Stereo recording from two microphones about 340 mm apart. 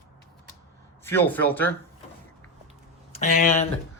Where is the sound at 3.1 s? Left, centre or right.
Centre.